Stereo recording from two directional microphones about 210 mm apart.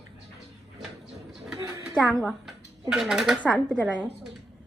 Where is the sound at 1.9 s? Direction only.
Centre (ahead or behind).